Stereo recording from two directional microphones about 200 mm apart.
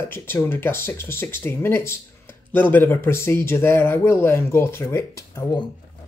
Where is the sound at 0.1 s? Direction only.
10° left (ahead or behind).